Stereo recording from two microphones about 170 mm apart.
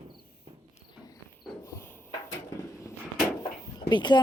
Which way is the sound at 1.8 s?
15° left (ahead or behind).